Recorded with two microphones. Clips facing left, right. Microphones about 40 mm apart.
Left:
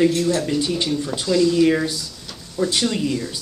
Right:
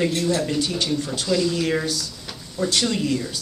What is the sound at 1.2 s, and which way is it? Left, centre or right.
Speech, centre.